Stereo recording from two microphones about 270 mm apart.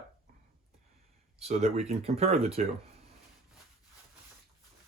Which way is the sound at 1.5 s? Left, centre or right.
Right.